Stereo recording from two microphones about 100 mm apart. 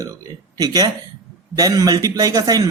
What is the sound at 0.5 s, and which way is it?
Speech, 40° right (ahead or behind).